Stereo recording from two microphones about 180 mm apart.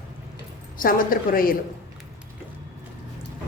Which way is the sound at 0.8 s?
50° left (ahead or behind).